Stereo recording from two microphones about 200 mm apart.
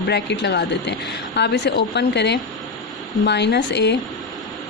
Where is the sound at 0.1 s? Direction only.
60° left (ahead or behind).